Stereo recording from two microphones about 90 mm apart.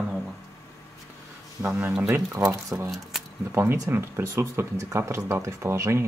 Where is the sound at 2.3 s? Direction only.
35° right (ahead or behind).